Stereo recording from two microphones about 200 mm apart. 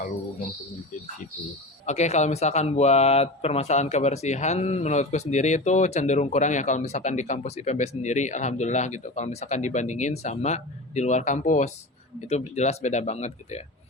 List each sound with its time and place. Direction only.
1.9 s speech: 35° left (ahead or behind)